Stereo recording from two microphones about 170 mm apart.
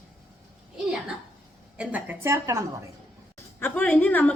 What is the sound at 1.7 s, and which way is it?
Speech, 10° right (ahead or behind).